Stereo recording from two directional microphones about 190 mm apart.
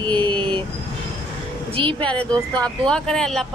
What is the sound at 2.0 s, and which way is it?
Speech, 5° left (ahead or behind).